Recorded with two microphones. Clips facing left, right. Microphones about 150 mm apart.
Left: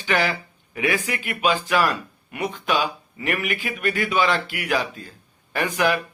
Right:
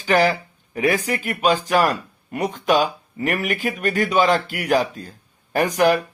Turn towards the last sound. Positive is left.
turn(degrees=-40)  # may be behind; listen again after turning